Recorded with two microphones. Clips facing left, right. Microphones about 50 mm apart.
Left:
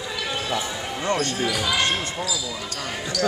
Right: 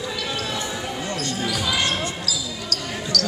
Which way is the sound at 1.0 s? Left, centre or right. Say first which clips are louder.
Left 9 dB; left.